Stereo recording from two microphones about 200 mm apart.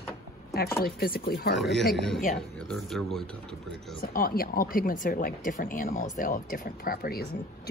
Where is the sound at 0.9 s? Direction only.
50° left (ahead or behind).